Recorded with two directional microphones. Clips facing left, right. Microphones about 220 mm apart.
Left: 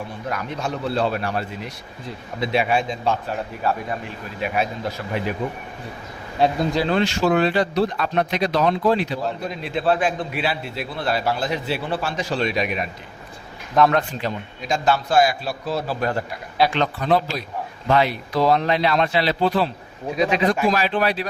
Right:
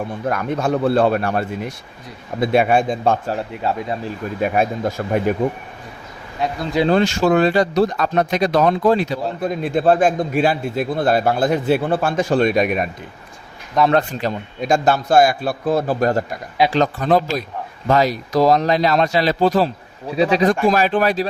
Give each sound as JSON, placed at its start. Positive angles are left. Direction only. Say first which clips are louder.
{"t": 0.3, "sound": "speech", "louder": "right 8 dB", "side_deg": -50}
{"t": 3.6, "sound": "speech", "louder": "right 2 dB", "side_deg": -25}
{"t": 4.4, "sound": "speech", "louder": "right 5 dB", "side_deg": -45}
{"t": 6.4, "sound": "speech", "louder": "left 4 dB", "side_deg": 30}
{"t": 6.8, "sound": "speech", "louder": "right 7 dB", "side_deg": -45}
{"t": 13.9, "sound": "a man's voice", "louder": "right 4 dB", "side_deg": -40}
{"t": 20.7, "sound": "speech", "louder": "right 4 dB", "side_deg": -45}